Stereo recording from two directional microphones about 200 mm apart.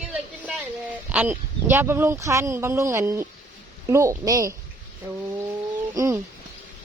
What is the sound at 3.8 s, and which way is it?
Speech, 15° right (ahead or behind).